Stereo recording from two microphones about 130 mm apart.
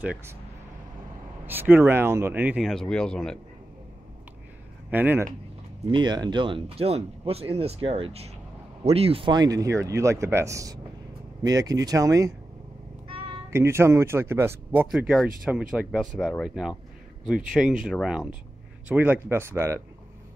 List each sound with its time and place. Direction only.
0.0 s speech: 10° right (ahead or behind)
1.4 s speech: 15° right (ahead or behind)
2.6 s speech: 5° left (ahead or behind)
4.9 s speech: 15° right (ahead or behind)
5.9 s speech: 35° right (ahead or behind)
13.5 s speech: 20° right (ahead or behind)
14.9 s speech: centre (ahead or behind); by 19.8 s 20° right (ahead or behind)